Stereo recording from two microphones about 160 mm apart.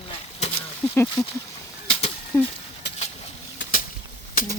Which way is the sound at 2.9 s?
90° left.